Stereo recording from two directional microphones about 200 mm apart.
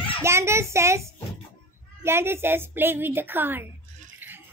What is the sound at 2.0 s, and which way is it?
A child's voice, 10° right (ahead or behind).